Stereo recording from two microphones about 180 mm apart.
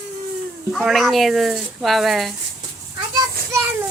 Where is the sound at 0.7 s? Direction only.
Centre (ahead or behind).